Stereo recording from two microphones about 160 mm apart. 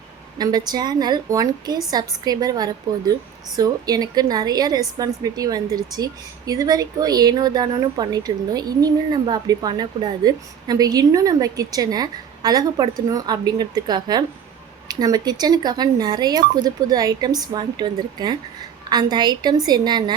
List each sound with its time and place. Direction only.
0.3 s a woman's voice: 25° right (ahead or behind)